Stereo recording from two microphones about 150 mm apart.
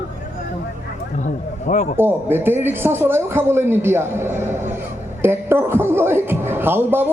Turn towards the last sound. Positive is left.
turn(degrees=-15)  # may be behind; listen again after turning